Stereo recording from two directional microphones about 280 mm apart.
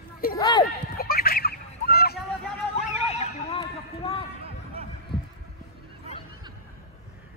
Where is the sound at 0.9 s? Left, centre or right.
Left.